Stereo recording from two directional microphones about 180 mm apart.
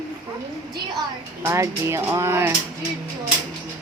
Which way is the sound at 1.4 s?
15° right (ahead or behind).